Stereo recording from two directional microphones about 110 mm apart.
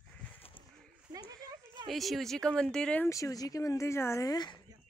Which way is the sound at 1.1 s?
35° right (ahead or behind).